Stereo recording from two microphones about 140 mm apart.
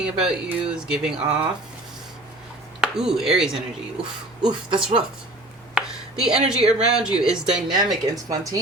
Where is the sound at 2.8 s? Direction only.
5° right (ahead or behind).